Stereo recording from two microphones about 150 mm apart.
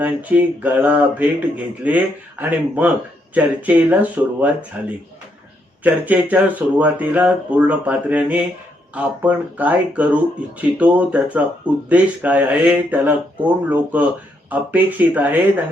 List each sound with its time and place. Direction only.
0.0 s speech: 10° right (ahead or behind)